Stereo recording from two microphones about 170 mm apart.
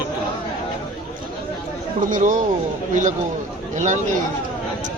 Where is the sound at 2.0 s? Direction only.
50° right (ahead or behind).